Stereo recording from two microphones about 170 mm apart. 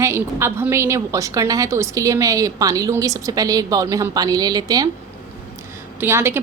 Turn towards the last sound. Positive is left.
turn(degrees=-15)  # may be behind; listen again after turning